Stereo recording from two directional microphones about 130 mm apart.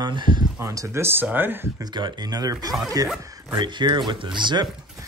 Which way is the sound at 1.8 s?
35° right (ahead or behind).